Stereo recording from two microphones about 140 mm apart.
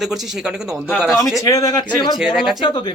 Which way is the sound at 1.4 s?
25° left (ahead or behind).